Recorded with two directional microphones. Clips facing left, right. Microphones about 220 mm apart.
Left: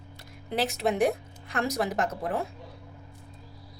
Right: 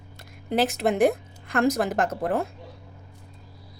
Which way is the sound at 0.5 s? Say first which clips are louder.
Right 4 dB; 50° right (ahead or behind).